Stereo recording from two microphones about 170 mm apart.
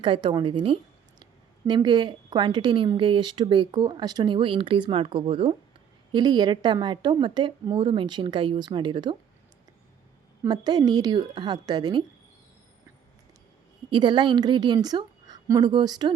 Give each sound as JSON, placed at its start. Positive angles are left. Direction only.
{"t": 0.0, "sound": "a woman's voice", "side_deg": -30}
{"t": 10.5, "sound": "a woman's voice", "side_deg": -25}
{"t": 13.9, "sound": "a woman's voice", "side_deg": -30}